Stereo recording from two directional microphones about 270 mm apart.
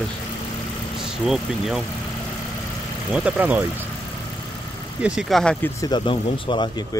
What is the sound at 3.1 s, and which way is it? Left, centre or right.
Speech, centre.